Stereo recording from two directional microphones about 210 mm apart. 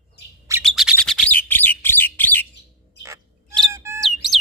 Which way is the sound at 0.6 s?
Centre (ahead or behind).